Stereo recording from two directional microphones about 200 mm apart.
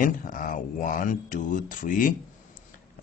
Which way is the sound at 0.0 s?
45° left (ahead or behind).